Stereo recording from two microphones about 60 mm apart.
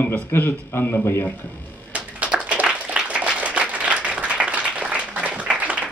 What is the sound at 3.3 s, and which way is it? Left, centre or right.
Applause, centre.